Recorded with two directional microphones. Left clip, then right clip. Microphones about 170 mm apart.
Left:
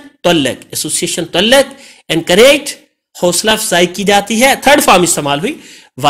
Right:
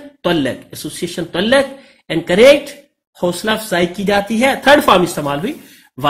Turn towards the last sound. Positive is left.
turn(degrees=25)  # may be behind; listen again after turning